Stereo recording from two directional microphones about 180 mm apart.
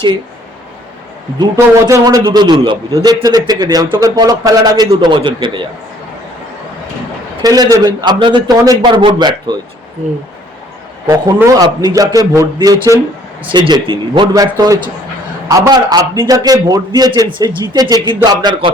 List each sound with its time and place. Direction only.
1.4 s a man's voice: 20° right (ahead or behind)
7.4 s a man's voice: 20° right (ahead or behind)
11.0 s a man's voice: 15° right (ahead or behind)